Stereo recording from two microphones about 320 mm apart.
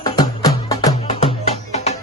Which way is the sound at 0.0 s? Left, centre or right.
Centre.